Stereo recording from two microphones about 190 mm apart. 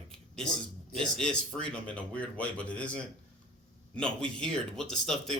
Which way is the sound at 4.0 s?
5° left (ahead or behind).